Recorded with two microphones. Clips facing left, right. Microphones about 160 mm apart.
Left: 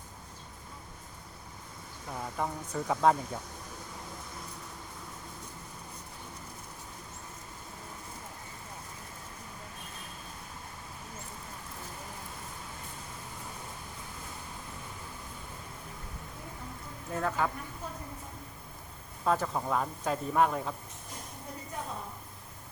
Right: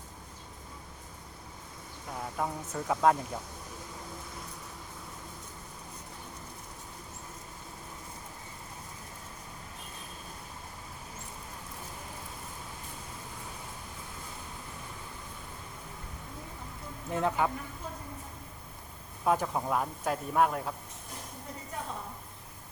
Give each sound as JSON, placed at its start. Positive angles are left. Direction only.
{"t": 2.1, "sound": "speech", "side_deg": 0}
{"t": 17.1, "sound": "speech", "side_deg": -20}
{"t": 19.2, "sound": "speech", "side_deg": -10}